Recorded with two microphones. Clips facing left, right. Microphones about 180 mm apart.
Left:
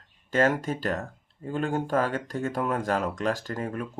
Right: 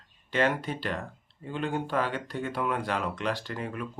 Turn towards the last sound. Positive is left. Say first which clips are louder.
# left 3 dB
turn(degrees=45)  # may be behind; listen again after turning